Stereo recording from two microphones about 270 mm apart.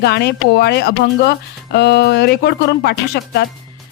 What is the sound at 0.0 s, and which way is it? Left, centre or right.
Speech, left.